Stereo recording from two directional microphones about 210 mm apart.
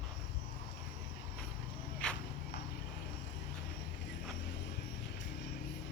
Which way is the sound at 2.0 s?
5° left (ahead or behind).